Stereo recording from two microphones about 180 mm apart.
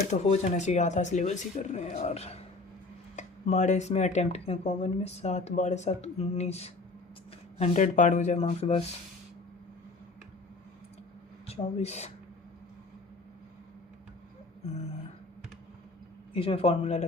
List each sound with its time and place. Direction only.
0.1 s speech: 40° left (ahead or behind)
11.4 s speech: 35° left (ahead or behind)
16.3 s speech: 30° left (ahead or behind)